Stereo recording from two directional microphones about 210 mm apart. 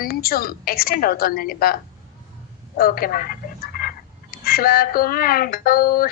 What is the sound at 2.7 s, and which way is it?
Speech, 45° left (ahead or behind).